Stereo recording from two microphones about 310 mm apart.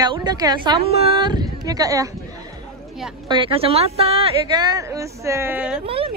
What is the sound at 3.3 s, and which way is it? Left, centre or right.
A woman's voice, centre.